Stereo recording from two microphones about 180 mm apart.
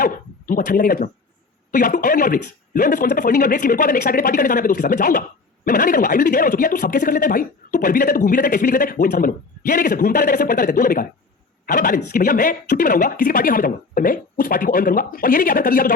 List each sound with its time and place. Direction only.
0.0 s speech: 50° left (ahead or behind)